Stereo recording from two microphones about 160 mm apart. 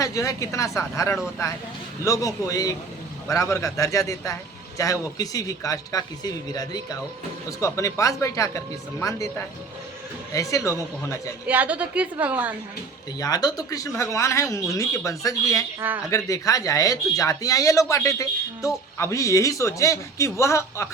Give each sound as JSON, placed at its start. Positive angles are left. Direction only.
{"t": 0.0, "sound": "speech", "side_deg": 20}
{"t": 10.3, "sound": "speech", "side_deg": 20}
{"t": 11.4, "sound": "a woman's voice", "side_deg": -10}
{"t": 13.1, "sound": "speech", "side_deg": 25}